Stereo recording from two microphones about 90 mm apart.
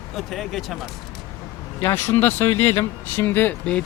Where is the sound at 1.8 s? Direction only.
25° left (ahead or behind).